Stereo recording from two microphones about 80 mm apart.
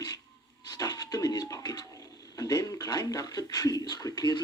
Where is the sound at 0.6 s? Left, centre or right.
Left.